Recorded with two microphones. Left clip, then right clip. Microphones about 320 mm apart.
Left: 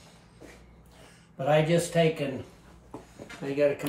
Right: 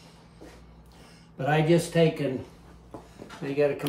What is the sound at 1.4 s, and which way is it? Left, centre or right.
Speech, centre.